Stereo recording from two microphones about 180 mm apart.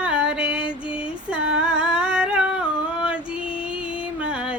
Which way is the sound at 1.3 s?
5° right (ahead or behind).